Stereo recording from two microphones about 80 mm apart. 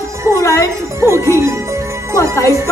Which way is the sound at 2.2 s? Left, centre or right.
Left.